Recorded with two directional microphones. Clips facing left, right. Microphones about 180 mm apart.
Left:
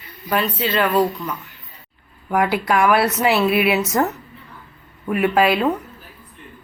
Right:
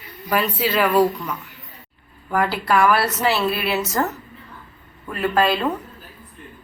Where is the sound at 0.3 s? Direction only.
5° right (ahead or behind).